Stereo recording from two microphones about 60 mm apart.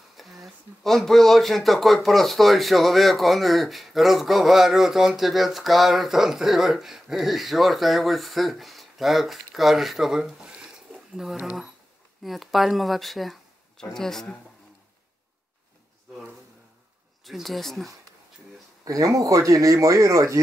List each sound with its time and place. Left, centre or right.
0.2 s speech: centre
12.2 s speech: centre
17.2 s speech: centre
18.9 s speech: right